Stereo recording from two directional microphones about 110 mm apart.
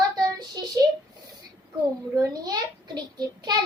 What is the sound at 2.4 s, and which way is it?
A child's voice, 40° right (ahead or behind).